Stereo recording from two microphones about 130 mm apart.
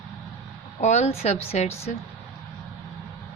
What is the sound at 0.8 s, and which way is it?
A woman's voice, 60° left (ahead or behind).